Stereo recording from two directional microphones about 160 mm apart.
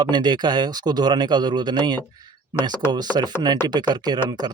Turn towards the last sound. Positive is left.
turn(degrees=-25)  # may be behind; listen again after turning